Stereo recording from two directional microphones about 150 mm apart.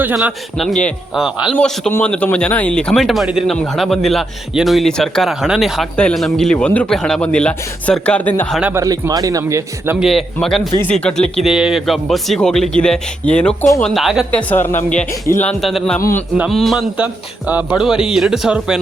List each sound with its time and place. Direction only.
0.0 s speech: 10° right (ahead or behind); by 8.5 s 10° left (ahead or behind)
8.7 s speech: 25° right (ahead or behind)
10.0 s speech: centre (ahead or behind)
14.3 s speech: 10° left (ahead or behind)
15.6 s speech: centre (ahead or behind)
16.0 s speech: 20° left (ahead or behind)
16.5 s speech: centre (ahead or behind)
17.0 s speech: 10° right (ahead or behind)